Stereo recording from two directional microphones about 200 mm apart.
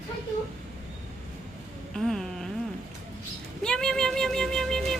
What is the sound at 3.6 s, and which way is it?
A woman's voice, 5° left (ahead or behind).